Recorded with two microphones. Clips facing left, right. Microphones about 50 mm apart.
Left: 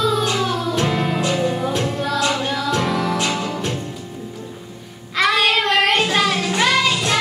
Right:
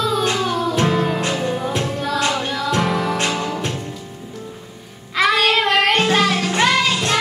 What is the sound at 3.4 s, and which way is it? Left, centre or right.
Music, centre.